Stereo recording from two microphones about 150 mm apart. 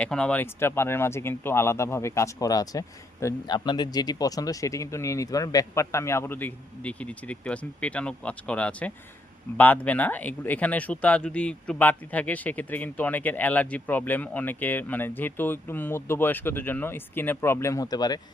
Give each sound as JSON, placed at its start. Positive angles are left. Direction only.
{"t": 0.0, "sound": "speech", "side_deg": 5}